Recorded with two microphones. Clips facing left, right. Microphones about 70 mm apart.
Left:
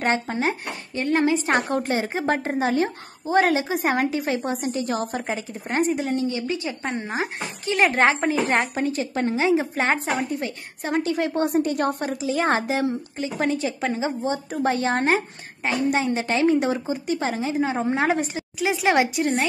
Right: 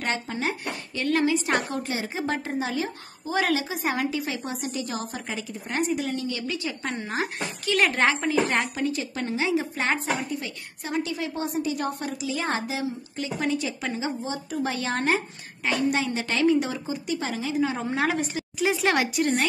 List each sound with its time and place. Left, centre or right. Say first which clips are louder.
0.0 s a woman's voice: left 5 dB; left
10.3 s a woman's voice: left 4 dB; left
12.2 s a woman's voice: left 7 dB; left
18.7 s speech: left 4 dB; centre